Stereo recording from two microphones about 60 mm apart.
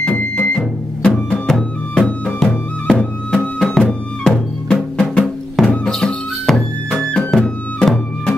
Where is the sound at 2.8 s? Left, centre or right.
Centre.